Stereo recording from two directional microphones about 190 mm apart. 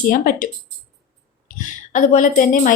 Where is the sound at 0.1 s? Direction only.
45° left (ahead or behind).